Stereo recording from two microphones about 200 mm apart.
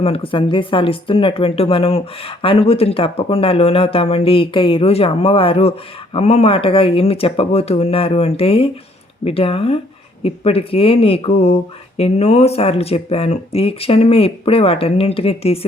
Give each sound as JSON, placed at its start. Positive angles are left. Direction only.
{"t": 0.0, "sound": "speech", "side_deg": 30}